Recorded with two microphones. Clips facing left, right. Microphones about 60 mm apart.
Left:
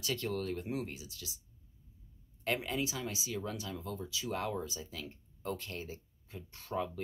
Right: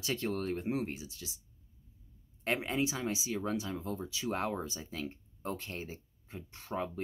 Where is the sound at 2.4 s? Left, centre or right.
Right.